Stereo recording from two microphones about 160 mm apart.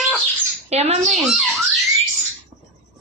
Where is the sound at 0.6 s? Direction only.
40° right (ahead or behind).